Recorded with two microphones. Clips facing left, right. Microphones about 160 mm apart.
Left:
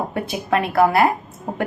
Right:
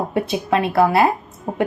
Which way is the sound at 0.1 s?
25° right (ahead or behind).